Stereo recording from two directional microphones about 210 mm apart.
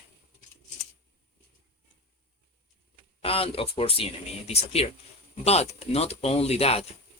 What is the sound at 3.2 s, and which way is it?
Speech, 25° left (ahead or behind).